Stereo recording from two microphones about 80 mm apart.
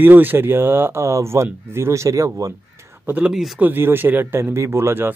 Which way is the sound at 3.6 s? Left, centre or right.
Right.